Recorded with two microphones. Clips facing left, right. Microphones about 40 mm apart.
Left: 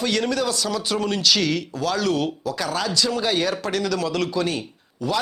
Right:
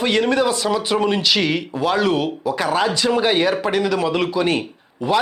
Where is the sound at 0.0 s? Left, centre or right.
Right.